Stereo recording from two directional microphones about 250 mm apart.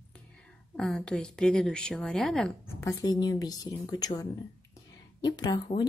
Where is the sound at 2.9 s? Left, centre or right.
Centre.